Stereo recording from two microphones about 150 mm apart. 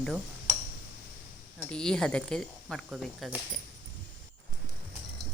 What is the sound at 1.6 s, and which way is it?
Speech, 5° left (ahead or behind).